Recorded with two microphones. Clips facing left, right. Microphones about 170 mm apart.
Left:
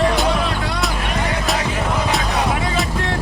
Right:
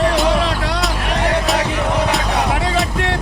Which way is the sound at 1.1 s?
70° right (ahead or behind).